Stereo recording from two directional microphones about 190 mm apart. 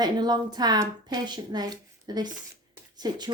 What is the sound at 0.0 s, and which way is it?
Speech, 20° right (ahead or behind).